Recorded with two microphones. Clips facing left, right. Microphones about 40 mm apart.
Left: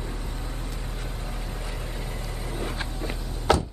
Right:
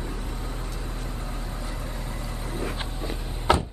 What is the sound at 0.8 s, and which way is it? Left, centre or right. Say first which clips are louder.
Vehicle: right 1 dB; left.